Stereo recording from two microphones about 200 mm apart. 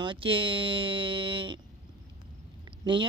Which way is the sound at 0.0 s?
25° right (ahead or behind).